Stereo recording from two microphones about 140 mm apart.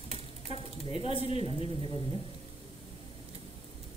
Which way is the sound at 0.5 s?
45° left (ahead or behind).